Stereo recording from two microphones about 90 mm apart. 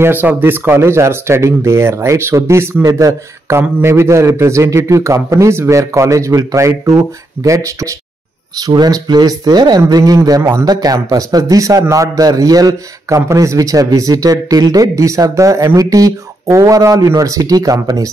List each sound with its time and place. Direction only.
0.0 s a man's voice: 20° right (ahead or behind); by 7.9 s 35° right (ahead or behind)
8.5 s a man's voice: 50° right (ahead or behind)